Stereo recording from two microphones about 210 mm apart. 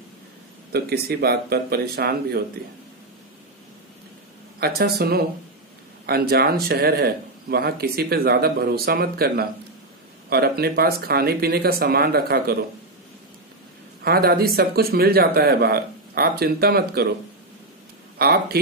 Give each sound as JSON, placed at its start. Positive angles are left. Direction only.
{"t": 0.7, "sound": "speech", "side_deg": -50}
{"t": 4.6, "sound": "speech", "side_deg": -50}
{"t": 14.0, "sound": "speech", "side_deg": -45}
{"t": 18.1, "sound": "speech", "side_deg": -50}